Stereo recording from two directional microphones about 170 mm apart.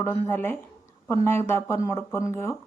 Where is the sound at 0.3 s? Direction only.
15° left (ahead or behind).